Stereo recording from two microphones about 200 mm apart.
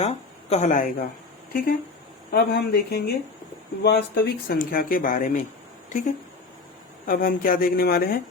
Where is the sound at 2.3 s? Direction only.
55° left (ahead or behind).